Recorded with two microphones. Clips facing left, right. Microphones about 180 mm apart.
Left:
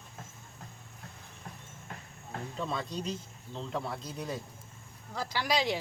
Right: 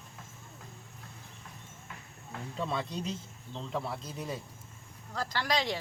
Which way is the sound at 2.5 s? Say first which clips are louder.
Right 1 dB; centre (ahead or behind).